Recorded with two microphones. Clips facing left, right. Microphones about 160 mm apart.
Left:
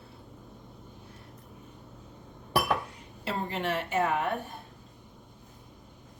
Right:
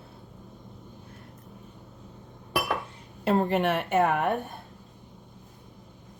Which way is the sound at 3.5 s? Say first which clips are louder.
Right 6 dB; 65° right (ahead or behind).